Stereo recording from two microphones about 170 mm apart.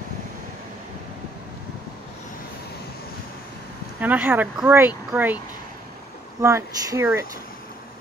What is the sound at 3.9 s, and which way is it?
Speech, 10° right (ahead or behind).